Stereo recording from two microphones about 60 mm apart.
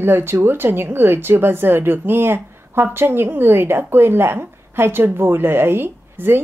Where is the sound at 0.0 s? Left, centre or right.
Right.